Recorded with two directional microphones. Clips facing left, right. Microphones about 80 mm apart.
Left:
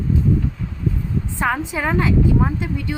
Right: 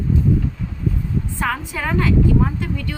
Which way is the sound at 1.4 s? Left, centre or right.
Centre.